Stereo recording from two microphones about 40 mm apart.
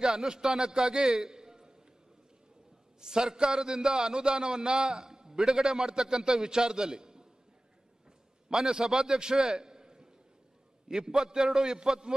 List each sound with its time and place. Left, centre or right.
0.0 s a man's voice: centre
3.0 s a man's voice: centre
8.5 s a man's voice: centre